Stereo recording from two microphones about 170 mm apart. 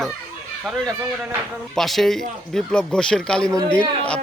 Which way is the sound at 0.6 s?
5° right (ahead or behind).